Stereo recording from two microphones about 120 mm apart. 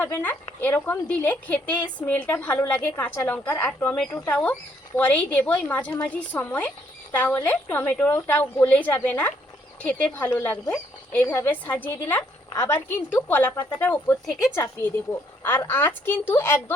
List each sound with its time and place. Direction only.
0.0 s a woman's voice: 15° left (ahead or behind)